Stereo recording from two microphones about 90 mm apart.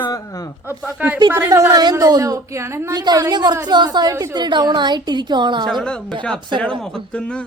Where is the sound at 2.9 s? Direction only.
50° right (ahead or behind).